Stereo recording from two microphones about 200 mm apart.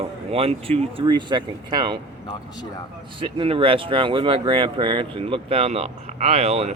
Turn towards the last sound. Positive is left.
turn(degrees=-30)  # may be behind; listen again after turning